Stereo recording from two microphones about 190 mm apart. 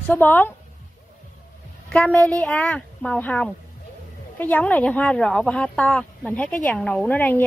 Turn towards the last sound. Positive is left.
turn(degrees=10)  # may be behind; listen again after turning